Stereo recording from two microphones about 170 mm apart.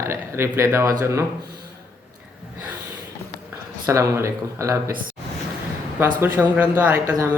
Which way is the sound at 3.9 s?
15° right (ahead or behind).